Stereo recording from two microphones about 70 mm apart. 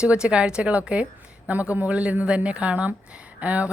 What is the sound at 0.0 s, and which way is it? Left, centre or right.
Speech, centre.